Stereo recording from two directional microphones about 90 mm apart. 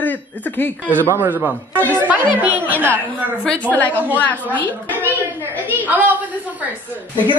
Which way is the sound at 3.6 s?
20° left (ahead or behind).